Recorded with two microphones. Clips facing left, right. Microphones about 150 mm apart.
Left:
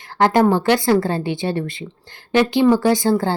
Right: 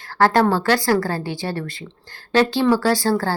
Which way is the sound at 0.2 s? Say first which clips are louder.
Left 2 dB; 15° left (ahead or behind).